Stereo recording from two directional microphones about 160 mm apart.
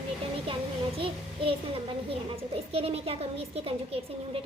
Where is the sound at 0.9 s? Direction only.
35° right (ahead or behind).